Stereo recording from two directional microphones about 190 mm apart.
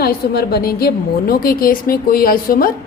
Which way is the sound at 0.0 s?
55° left (ahead or behind).